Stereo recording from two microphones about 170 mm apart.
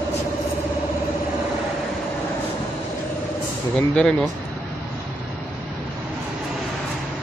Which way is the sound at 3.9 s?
5° left (ahead or behind).